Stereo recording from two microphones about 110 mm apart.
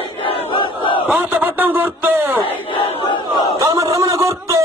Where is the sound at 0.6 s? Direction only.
50° left (ahead or behind).